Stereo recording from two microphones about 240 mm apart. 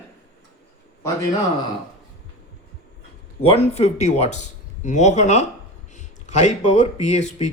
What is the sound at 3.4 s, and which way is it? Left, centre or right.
Speech, left.